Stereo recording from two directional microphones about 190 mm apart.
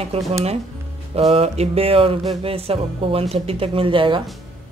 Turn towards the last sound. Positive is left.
turn(degrees=-25)  # may be behind; listen again after turning